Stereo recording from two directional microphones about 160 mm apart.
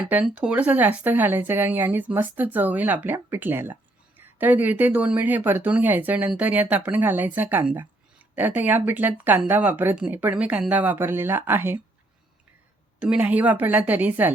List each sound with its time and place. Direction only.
0.1 s speech: 10° right (ahead or behind)
13.0 s speech: 10° right (ahead or behind)